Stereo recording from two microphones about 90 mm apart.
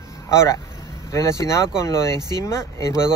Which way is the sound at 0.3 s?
30° left (ahead or behind).